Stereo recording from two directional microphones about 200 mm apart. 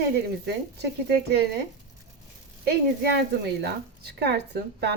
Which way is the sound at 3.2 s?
55° right (ahead or behind).